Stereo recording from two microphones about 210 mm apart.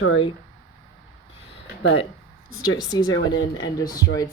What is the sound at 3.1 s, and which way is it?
Speech, 65° left (ahead or behind).